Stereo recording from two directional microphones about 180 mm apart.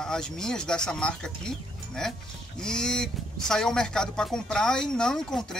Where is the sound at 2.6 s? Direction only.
5° left (ahead or behind).